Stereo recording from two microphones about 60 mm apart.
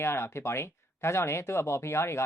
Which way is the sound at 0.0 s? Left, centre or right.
Left.